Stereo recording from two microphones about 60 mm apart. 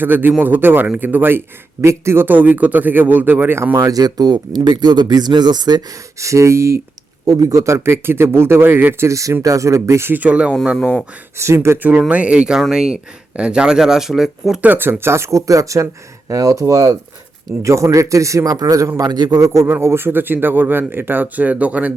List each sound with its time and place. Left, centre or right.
0.0 s speech: right
1.8 s speech: right
2.2 s speech: right
3.8 s speech: right
5.7 s speech: right
6.1 s speech: right
7.3 s speech: right
9.0 s a man's voice: right
10.1 s speech: right
10.8 s speech: centre
11.3 s speech: right
11.8 s speech: right; by 14.6 s centre
14.6 s a man's voice: right
19.6 s speech: right